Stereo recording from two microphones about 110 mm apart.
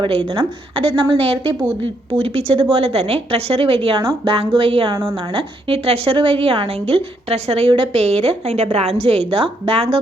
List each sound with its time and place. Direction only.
0.0 s a woman's voice: 50° right (ahead or behind)
5.6 s a woman's voice: 65° right (ahead or behind)